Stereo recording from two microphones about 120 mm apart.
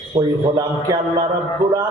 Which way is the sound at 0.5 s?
35° right (ahead or behind).